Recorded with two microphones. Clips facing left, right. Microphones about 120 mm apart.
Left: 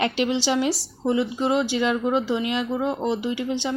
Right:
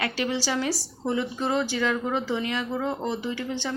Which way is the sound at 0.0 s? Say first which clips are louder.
Left 5 dB; 20° left (ahead or behind).